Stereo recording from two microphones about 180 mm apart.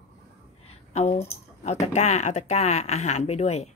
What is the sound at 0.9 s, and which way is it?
Speech, 35° left (ahead or behind).